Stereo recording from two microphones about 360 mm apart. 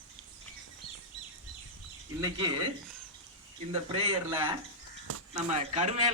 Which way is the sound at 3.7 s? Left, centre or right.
Centre.